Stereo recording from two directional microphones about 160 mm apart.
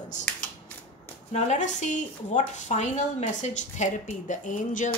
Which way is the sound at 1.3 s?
45° left (ahead or behind).